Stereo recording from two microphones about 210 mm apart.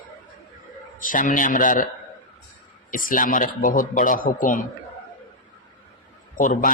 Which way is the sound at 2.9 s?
40° left (ahead or behind).